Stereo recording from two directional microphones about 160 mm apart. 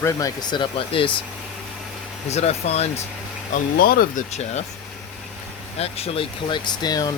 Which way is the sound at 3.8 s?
65° left (ahead or behind).